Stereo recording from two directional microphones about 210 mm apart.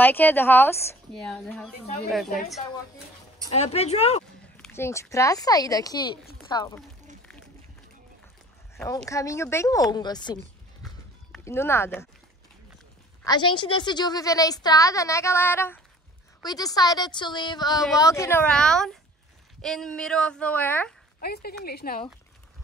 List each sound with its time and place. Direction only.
0.0 s a woman's voice: 10° left (ahead or behind)
3.5 s speech: 30° left (ahead or behind)
4.6 s a woman's voice: 10° left (ahead or behind)
8.8 s a woman's voice: 15° left (ahead or behind)
11.4 s a woman's voice: 10° left (ahead or behind)
13.2 s a woman's voice: 20° left (ahead or behind)
21.2 s speech: 45° left (ahead or behind)